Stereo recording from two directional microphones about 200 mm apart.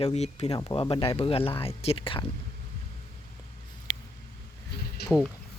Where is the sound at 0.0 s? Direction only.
35° left (ahead or behind).